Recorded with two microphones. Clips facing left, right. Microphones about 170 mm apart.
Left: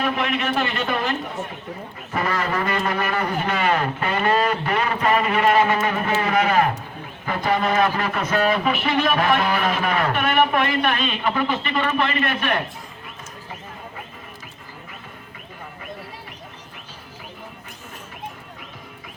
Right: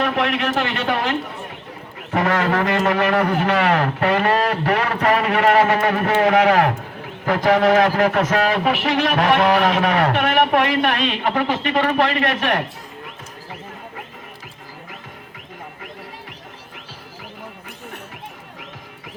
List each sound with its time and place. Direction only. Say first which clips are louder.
0.0 s a man's voice: right 3 dB; 80° right
2.1 s a man's voice: right 5 dB; 85° right